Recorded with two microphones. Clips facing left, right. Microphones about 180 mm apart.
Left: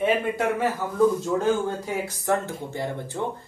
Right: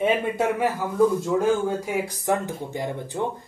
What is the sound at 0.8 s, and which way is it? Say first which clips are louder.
Speech: right 1 dB; 10° right (ahead or behind).